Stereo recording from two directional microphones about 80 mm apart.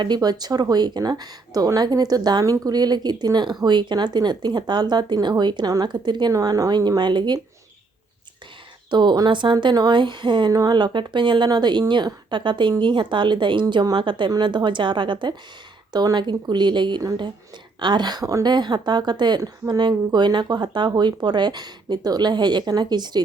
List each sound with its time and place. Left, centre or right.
0.0 s a woman's voice: right
6.3 s speech: right
8.9 s a woman's voice: right
10.5 s a woman's voice: right
15.9 s a woman's voice: right
18.5 s a woman's voice: right